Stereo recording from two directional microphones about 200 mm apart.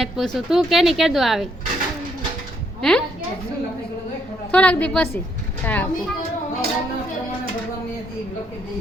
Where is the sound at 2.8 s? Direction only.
5° left (ahead or behind).